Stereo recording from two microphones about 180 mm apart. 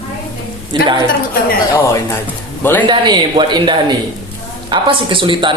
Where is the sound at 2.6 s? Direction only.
10° left (ahead or behind).